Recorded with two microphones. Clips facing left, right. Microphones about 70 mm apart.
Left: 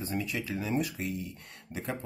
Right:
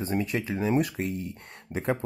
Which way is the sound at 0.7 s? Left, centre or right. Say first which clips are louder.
Right 5 dB; right.